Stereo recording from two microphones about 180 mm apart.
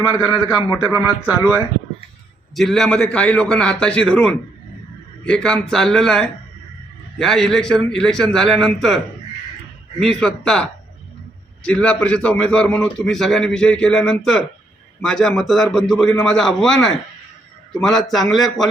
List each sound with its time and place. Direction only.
0.0 s a man's voice: 20° left (ahead or behind)
2.6 s a man's voice: centre (ahead or behind)
10.0 s a man's voice: 5° left (ahead or behind)